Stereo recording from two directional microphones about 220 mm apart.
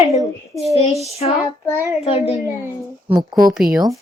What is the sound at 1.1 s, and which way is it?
A child's voice, 30° left (ahead or behind).